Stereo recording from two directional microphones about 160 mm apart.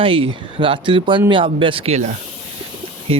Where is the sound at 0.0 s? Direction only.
35° right (ahead or behind).